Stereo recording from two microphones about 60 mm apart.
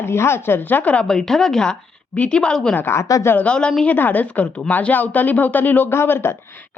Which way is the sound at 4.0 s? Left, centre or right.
Left.